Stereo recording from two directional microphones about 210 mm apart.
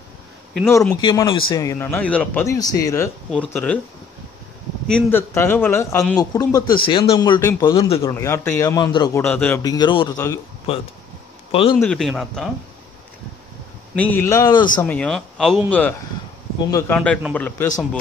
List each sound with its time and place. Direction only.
0.6 s a man's voice: 10° left (ahead or behind)
4.8 s a man's voice: 5° left (ahead or behind)
7.3 s a man's voice: 10° left (ahead or behind)
7.7 s speech: 25° left (ahead or behind)
8.1 s a man's voice: 10° left (ahead or behind)
13.9 s a man's voice: 10° left (ahead or behind)
14.8 s a man's voice: 5° left (ahead or behind)
16.7 s a man's voice: 10° left (ahead or behind)